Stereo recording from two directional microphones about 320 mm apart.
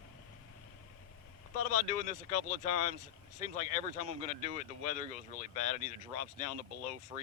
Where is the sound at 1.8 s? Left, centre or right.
Left.